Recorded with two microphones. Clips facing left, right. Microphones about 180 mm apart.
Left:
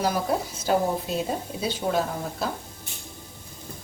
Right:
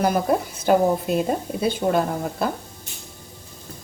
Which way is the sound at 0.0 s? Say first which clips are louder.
Right 5 dB; 55° right (ahead or behind).